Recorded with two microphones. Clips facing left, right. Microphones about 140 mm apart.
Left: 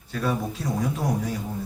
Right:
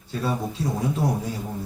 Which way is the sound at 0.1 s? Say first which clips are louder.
Even; 25° right (ahead or behind).